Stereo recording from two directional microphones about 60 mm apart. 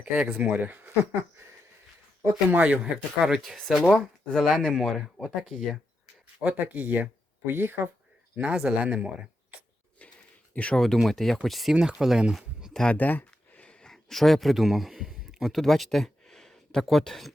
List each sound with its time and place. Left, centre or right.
0.0 s speech: centre
2.5 s speech: right; by 3.8 s centre
3.8 s speech: right
4.3 s speech: centre
6.4 s speech: right
7.4 s speech: right
8.4 s speech: centre
10.0 s a sound: left
10.5 s speech: left
10.8 s speech: centre
12.9 s speech: left; by 17.3 s centre